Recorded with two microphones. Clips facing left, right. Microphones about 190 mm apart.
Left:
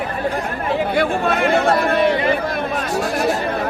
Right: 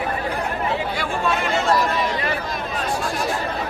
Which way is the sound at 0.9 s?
55° left (ahead or behind).